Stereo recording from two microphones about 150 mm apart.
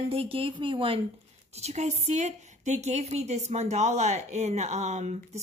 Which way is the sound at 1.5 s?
45° right (ahead or behind).